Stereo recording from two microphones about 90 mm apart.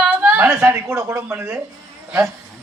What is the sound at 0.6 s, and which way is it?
Speech, 35° right (ahead or behind).